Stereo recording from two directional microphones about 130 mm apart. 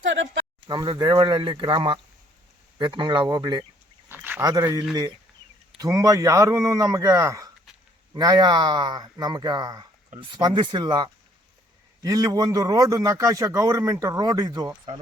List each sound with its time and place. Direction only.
0.7 s speech: 35° right (ahead or behind)
4.1 s a sound: 15° right (ahead or behind)
4.4 s a man's voice: 25° right (ahead or behind)